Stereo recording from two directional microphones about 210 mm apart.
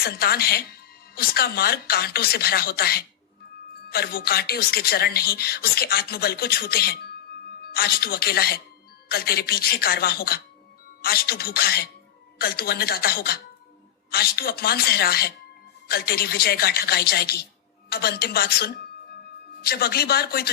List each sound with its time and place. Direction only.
0.0 s speech: 45° left (ahead or behind)